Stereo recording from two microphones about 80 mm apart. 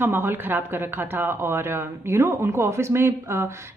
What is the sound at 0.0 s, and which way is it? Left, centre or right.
A woman's voice, right.